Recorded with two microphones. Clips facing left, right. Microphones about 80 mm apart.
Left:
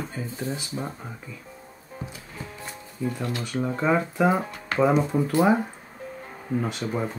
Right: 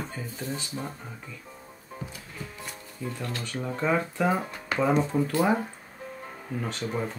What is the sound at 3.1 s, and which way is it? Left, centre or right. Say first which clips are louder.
Speech: left 5 dB; centre.